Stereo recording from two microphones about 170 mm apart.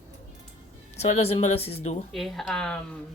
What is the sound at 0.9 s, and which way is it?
Speech, 40° left (ahead or behind).